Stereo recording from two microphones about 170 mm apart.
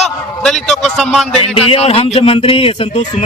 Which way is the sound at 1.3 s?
35° left (ahead or behind).